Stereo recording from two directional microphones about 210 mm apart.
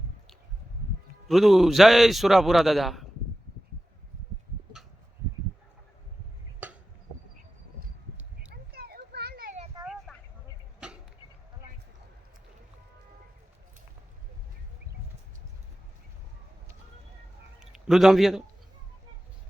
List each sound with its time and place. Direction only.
1.3 s a man's voice: centre (ahead or behind)
6.6 s a sound: 5° right (ahead or behind)
8.7 s children playing: 50° right (ahead or behind)
9.8 s vehicle: centre (ahead or behind)
10.8 s arrow: 5° right (ahead or behind)
17.6 s a man's voice: centre (ahead or behind)